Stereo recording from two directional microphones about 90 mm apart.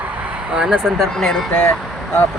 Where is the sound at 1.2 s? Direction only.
5° left (ahead or behind).